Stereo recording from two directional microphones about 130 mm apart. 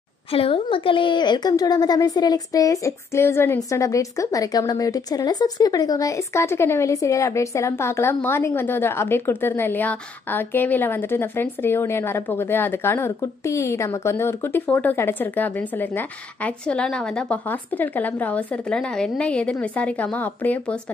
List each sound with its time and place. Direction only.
0.3 s a woman's voice: 45° left (ahead or behind); by 20.7 s 10° left (ahead or behind)